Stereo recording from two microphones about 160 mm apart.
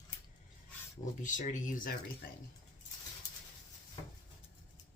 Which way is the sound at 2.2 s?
75° left (ahead or behind).